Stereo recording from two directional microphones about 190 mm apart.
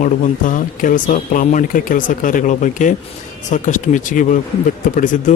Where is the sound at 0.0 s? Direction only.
45° left (ahead or behind).